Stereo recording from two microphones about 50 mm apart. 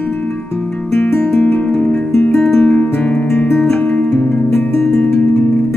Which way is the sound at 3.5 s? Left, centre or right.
Centre.